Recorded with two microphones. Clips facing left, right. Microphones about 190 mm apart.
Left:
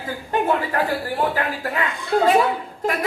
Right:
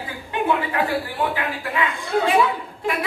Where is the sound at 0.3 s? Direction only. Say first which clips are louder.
Left 1 dB; 45° left (ahead or behind).